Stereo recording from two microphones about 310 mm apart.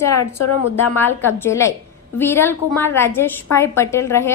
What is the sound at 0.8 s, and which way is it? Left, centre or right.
A woman's voice, centre.